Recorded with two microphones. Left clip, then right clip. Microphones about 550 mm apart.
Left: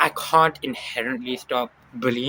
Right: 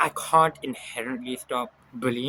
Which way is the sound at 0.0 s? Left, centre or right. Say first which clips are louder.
Left 3 dB; right.